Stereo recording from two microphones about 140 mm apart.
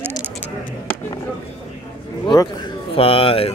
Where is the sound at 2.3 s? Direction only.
30° left (ahead or behind).